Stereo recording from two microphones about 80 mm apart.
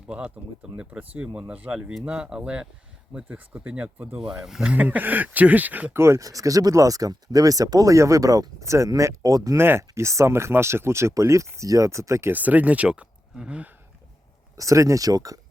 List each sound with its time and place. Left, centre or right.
0.8 s speech: centre
4.2 s speech: centre
4.7 s speech: centre
6.0 s speech: right
9.6 s speech: right
12.3 s speech: right
14.5 s speech: right